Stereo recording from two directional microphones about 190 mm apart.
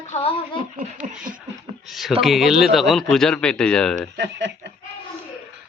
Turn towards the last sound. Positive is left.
turn(degrees=-65)  # may be behind; listen again after turning